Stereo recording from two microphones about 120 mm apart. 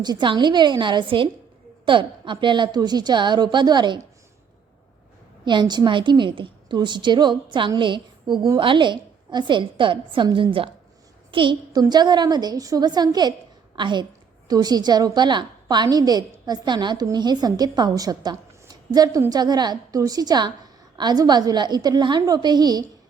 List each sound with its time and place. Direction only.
0.0 s a woman's voice: 40° right (ahead or behind)
5.5 s a woman's voice: 40° right (ahead or behind)